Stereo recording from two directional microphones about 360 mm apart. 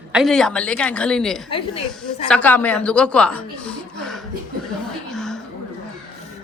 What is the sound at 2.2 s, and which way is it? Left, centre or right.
A man's voice, centre.